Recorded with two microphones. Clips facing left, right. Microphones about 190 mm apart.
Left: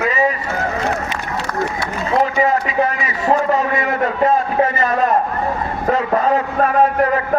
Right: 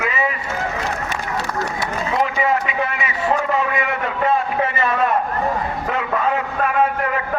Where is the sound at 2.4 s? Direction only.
40° left (ahead or behind).